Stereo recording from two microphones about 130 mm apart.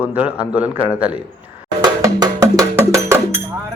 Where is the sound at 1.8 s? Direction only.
30° right (ahead or behind).